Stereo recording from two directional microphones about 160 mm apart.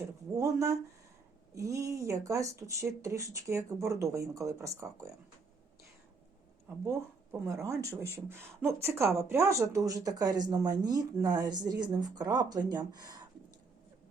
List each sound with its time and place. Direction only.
0.3 s speech: 20° right (ahead or behind)
6.8 s speech: 15° right (ahead or behind)